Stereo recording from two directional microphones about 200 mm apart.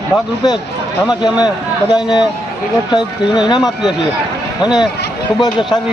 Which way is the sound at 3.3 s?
20° left (ahead or behind).